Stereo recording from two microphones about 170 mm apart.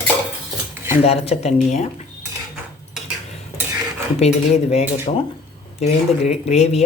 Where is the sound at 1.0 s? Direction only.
35° left (ahead or behind).